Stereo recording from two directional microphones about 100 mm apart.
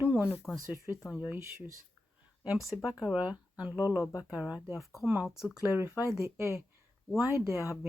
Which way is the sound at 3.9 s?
30° left (ahead or behind).